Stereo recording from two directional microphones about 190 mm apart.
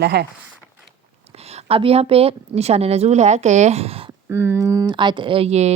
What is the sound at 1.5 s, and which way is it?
Speech, 30° right (ahead or behind).